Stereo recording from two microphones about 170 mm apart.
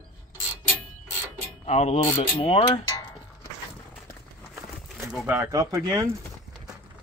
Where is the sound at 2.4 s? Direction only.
40° left (ahead or behind).